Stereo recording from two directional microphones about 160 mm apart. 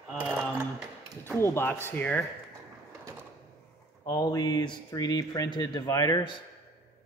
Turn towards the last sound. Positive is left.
turn(degrees=25)  # may be behind; listen again after turning